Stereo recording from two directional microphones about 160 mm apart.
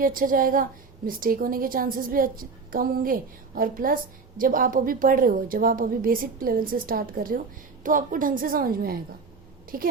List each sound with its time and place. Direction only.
0.0 s a woman's voice: 60° right (ahead or behind)